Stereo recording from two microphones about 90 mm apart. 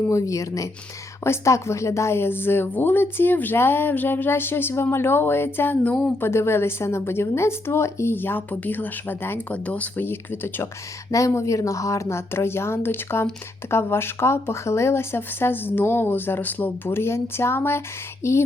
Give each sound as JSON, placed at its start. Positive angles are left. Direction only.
{"t": 0.1, "sound": "a woman's voice", "side_deg": 40}
{"t": 6.1, "sound": "a woman's voice", "side_deg": 25}
{"t": 11.1, "sound": "a woman's voice", "side_deg": 35}